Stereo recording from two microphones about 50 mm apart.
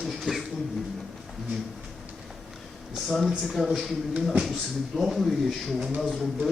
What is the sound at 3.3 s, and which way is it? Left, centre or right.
Speech, centre.